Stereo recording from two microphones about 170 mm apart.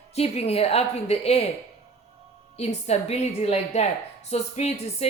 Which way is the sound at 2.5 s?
40° left (ahead or behind).